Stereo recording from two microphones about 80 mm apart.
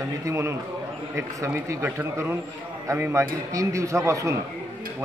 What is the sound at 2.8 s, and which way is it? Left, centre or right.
A man's voice, right.